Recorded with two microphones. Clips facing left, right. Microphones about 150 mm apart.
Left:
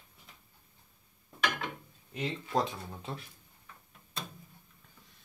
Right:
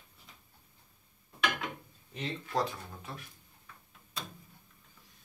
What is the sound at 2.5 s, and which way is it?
Speech, 25° left (ahead or behind).